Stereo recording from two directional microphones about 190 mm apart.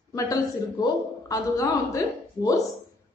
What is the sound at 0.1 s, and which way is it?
A woman's voice, 20° left (ahead or behind).